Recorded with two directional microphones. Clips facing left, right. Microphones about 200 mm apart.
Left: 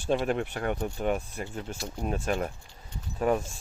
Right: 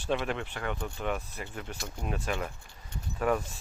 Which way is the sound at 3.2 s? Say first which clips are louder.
Left 2 dB; 25° left (ahead or behind).